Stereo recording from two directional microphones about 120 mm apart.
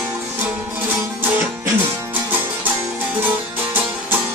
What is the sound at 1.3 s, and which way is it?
Music, 15° right (ahead or behind).